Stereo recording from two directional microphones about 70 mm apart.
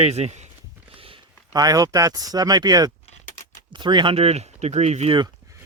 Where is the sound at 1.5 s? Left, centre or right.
Right.